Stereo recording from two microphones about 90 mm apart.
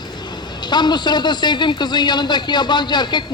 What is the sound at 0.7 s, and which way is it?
A man's voice, 55° left (ahead or behind).